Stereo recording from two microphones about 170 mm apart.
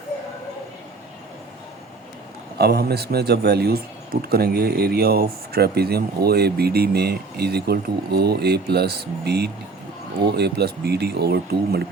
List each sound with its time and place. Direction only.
2.6 s a man's voice: 70° right (ahead or behind)